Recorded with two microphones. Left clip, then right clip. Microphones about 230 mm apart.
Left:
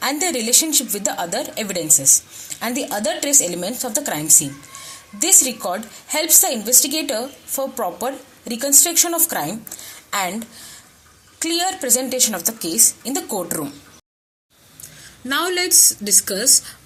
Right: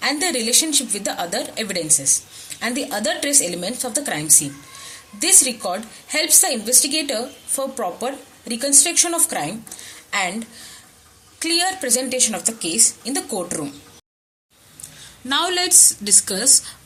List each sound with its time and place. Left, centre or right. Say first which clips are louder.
0.0 s a woman's voice: even; centre
15.3 s a woman's voice: even; centre